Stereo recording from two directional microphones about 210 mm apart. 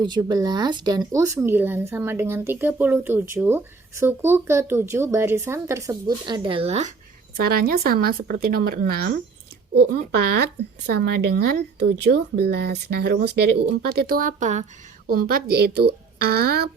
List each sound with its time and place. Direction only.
0.0 s speech: 20° right (ahead or behind)
7.3 s speech: 45° right (ahead or behind)